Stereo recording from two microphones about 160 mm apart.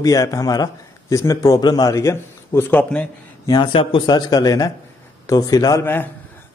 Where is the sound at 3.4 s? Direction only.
25° left (ahead or behind).